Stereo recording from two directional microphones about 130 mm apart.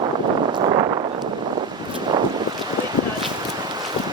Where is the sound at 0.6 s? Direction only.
35° right (ahead or behind).